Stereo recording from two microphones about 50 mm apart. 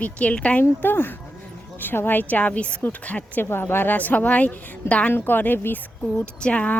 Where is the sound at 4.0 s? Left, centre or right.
Left.